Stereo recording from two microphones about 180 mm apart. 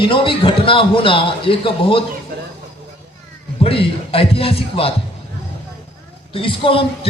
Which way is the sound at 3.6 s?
30° left (ahead or behind).